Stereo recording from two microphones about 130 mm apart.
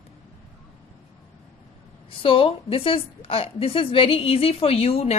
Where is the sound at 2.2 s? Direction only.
45° left (ahead or behind).